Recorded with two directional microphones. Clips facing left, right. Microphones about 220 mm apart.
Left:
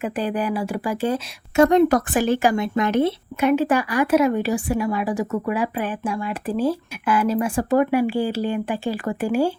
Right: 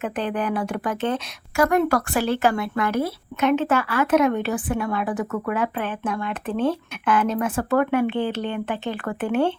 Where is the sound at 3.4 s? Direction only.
10° left (ahead or behind).